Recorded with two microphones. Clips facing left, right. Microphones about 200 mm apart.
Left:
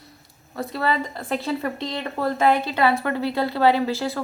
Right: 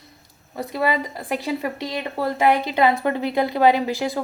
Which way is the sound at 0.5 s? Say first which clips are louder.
Right 2 dB; 15° right (ahead or behind).